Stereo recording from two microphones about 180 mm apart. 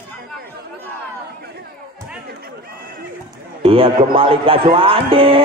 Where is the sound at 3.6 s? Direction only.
30° right (ahead or behind).